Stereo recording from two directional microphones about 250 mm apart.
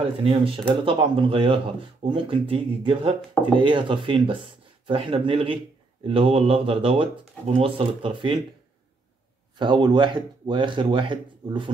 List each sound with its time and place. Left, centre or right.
0.0 s speech: right
9.6 s speech: centre